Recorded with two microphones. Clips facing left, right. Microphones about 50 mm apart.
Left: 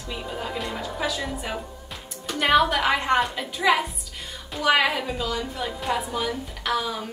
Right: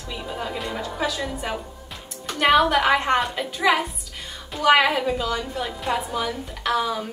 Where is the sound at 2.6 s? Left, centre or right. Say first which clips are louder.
Right 3 dB; centre.